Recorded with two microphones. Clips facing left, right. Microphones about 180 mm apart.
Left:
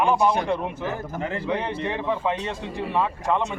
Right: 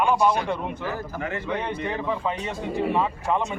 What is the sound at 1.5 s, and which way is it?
Speech, 5° left (ahead or behind).